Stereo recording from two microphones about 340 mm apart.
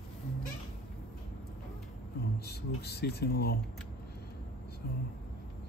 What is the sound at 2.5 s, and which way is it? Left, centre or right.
Speech, left.